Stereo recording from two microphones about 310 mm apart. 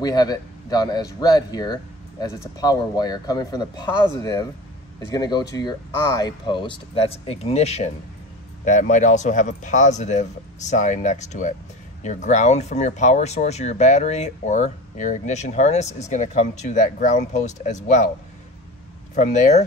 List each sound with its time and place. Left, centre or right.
0.0 s speech: centre
19.1 s speech: left